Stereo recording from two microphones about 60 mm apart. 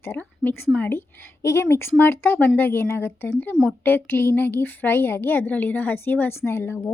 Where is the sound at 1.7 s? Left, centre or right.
Left.